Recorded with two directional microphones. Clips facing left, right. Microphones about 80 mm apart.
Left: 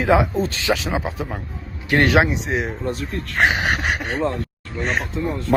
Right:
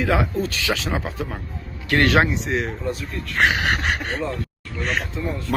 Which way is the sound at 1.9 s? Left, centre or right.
Left.